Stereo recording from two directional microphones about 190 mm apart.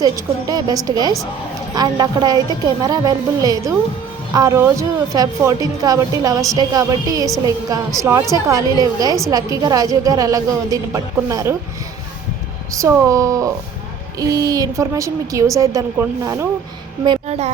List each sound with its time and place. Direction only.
0.0 s a woman's voice: 20° right (ahead or behind)
12.7 s a woman's voice: 15° right (ahead or behind)
17.2 s speech: 35° right (ahead or behind)